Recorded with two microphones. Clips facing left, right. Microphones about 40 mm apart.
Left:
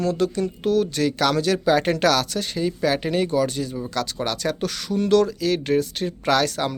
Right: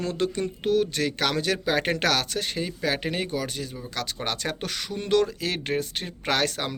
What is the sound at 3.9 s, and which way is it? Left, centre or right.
Speech, centre.